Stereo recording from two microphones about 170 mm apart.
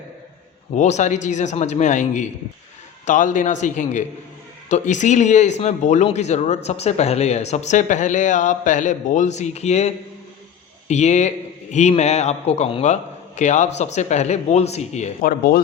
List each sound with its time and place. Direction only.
0.8 s a man's voice: 45° left (ahead or behind)
15.2 s speech: 55° left (ahead or behind)